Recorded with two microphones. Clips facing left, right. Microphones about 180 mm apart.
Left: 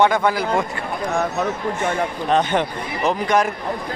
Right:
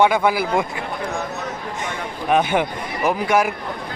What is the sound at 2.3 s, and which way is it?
A man's voice, 10° right (ahead or behind).